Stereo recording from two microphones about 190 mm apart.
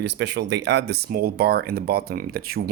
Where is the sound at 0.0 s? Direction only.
65° right (ahead or behind).